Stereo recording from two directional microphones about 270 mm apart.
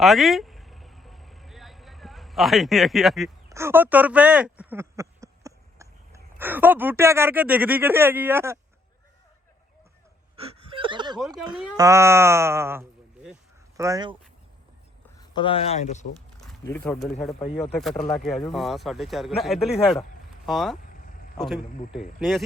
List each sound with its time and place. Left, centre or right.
0.0 s vehicle: centre
3.5 s speech: centre
10.3 s a sound: right
11.8 s speech: centre
15.2 s speech: centre
16.6 s speech: centre